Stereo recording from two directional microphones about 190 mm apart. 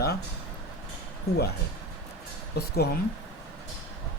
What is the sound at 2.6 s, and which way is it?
Speech, 55° left (ahead or behind).